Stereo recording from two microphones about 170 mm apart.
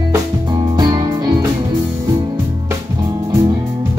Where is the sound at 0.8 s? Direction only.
25° right (ahead or behind).